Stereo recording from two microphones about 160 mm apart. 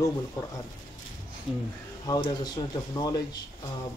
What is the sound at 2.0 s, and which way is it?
Speech, 25° left (ahead or behind).